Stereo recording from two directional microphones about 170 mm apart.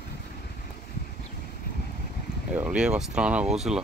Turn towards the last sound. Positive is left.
turn(degrees=0)  # may be behind; listen again after turning